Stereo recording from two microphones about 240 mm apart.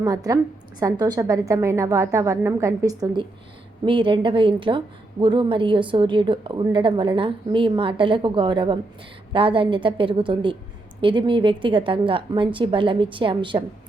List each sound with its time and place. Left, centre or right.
0.0 s a woman's voice: centre